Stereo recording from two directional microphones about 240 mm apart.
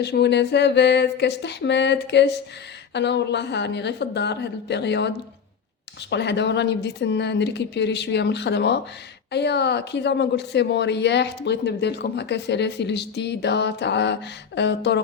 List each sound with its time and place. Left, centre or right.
0.0 s speech: left